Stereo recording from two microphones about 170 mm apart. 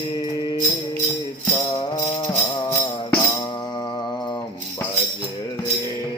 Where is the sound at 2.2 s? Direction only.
10° left (ahead or behind).